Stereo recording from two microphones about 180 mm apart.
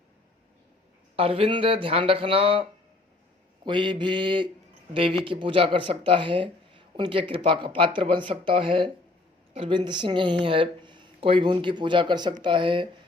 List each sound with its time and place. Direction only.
1.1 s speech: 30° right (ahead or behind)